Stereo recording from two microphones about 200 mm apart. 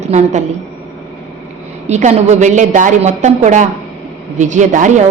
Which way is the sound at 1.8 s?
35° right (ahead or behind).